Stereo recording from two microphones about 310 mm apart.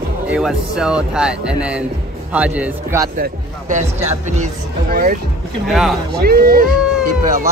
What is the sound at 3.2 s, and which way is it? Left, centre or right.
Speech, right.